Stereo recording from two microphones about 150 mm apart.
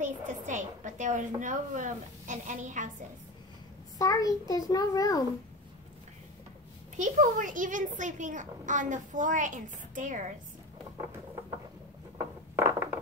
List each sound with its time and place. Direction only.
0.0 s a woman's voice: 55° right (ahead or behind)
4.0 s a child's voice: 25° left (ahead or behind)
7.0 s a woman's voice: 60° right (ahead or behind)
12.5 s a sound: 20° right (ahead or behind)